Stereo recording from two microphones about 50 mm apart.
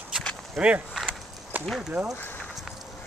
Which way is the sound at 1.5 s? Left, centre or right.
Right.